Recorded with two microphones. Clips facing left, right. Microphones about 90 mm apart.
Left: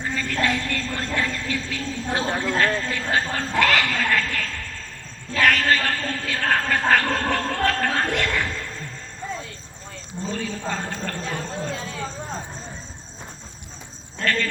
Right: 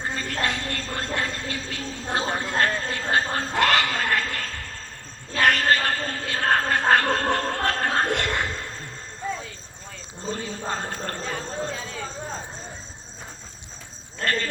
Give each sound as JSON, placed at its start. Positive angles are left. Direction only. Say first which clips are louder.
{"t": 0.0, "sound": "a woman's voice", "louder": "left 3 dB", "side_deg": -35}
{"t": 9.2, "sound": "basketball bounce", "louder": "right 2 dB", "side_deg": 0}
{"t": 10.3, "sound": "a woman's voice", "louder": "left 2 dB", "side_deg": -30}
{"t": 11.3, "sound": "speech", "louder": "even", "side_deg": 0}